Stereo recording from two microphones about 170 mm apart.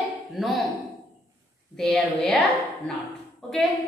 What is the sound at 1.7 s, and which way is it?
Speech, centre (ahead or behind).